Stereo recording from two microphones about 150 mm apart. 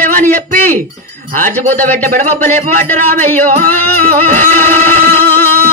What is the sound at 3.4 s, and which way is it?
Music, 70° right (ahead or behind).